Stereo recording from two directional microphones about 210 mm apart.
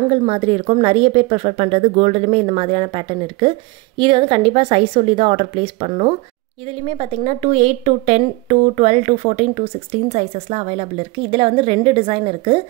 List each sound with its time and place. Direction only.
0.1 s a woman's voice: 30° right (ahead or behind)